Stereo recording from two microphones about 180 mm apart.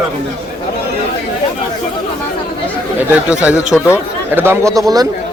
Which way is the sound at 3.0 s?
5° right (ahead or behind).